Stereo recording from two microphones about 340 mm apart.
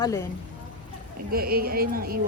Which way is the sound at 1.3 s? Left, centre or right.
Right.